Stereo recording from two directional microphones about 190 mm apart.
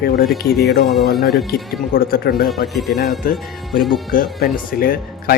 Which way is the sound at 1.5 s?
50° left (ahead or behind).